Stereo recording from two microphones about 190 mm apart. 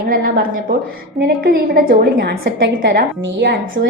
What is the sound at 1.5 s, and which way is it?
A woman's voice, 50° right (ahead or behind).